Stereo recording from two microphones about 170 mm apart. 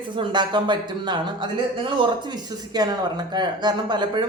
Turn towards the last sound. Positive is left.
turn(degrees=-25)  # may be behind; listen again after turning